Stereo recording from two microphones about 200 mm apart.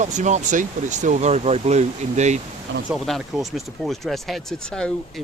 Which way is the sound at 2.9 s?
Centre (ahead or behind).